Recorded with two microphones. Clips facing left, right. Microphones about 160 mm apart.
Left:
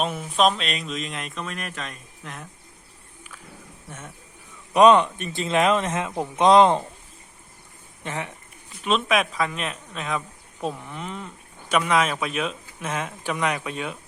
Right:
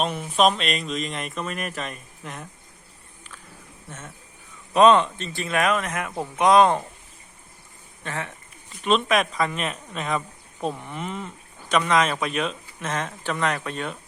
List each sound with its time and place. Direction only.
0.0 s speech: centre (ahead or behind)
3.8 s speech: 10° left (ahead or behind)
8.0 s speech: 15° left (ahead or behind)
8.8 s speech: centre (ahead or behind)